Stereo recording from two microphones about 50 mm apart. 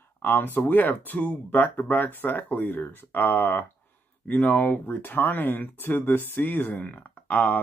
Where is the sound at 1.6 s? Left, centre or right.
Left.